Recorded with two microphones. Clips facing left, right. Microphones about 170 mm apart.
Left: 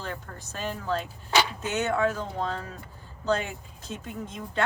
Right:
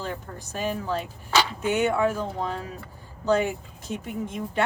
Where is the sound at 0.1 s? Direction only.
15° right (ahead or behind).